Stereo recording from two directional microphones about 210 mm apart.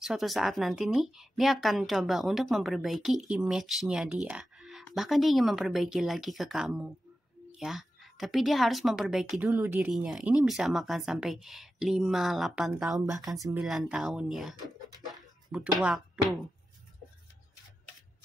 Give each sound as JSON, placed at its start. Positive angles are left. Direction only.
{"t": 0.0, "sound": "a woman's voice", "side_deg": 0}